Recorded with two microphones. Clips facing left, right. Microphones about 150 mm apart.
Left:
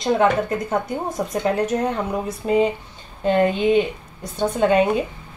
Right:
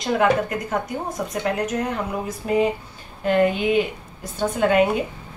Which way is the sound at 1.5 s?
30° left (ahead or behind).